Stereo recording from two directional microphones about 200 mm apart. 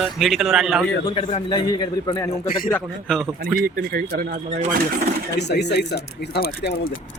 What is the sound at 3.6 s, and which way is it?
Speech, 45° right (ahead or behind).